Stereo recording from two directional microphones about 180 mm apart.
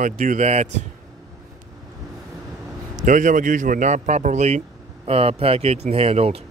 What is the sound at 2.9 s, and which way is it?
A man's voice, 45° right (ahead or behind).